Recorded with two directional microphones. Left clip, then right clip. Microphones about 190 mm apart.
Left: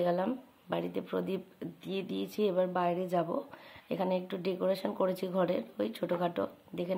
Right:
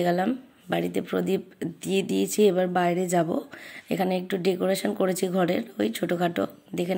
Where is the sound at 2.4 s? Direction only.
20° right (ahead or behind).